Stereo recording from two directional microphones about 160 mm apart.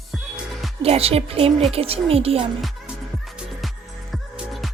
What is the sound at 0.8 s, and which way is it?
A woman's voice, 40° right (ahead or behind).